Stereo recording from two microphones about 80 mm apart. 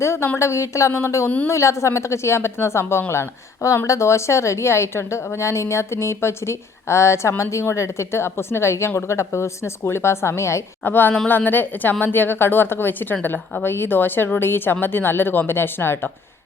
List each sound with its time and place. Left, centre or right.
0.0 s a woman's voice: left
10.8 s a woman's voice: left